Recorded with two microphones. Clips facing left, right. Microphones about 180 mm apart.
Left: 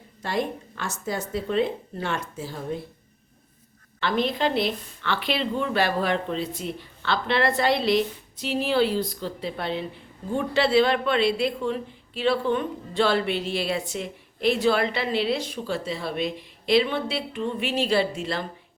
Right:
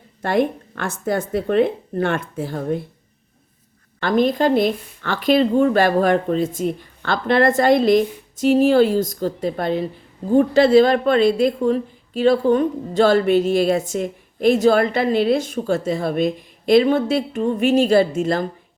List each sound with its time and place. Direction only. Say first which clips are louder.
0.2 s a woman's voice: right 8 dB; 55° right (ahead or behind)
4.0 s a woman's voice: right 7 dB; 45° right (ahead or behind)